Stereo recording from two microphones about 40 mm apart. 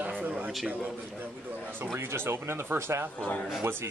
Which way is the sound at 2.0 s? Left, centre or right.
Right.